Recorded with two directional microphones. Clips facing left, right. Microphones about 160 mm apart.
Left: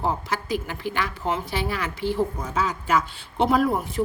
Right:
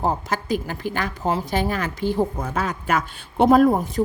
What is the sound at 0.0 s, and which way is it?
Speech, 45° right (ahead or behind).